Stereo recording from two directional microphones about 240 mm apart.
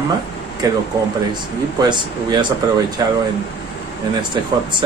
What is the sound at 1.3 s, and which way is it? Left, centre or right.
Speech, centre.